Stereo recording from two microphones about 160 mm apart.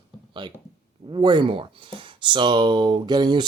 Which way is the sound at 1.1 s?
30° right (ahead or behind).